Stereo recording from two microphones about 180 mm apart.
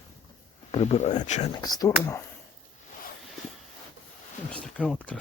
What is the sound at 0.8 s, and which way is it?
Speech, 40° left (ahead or behind).